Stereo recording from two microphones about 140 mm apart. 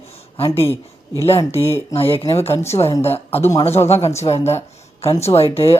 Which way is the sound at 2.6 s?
20° left (ahead or behind).